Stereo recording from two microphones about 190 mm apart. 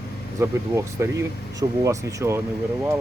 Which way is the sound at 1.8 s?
15° right (ahead or behind).